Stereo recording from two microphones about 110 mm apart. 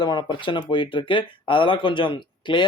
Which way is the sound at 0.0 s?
45° left (ahead or behind).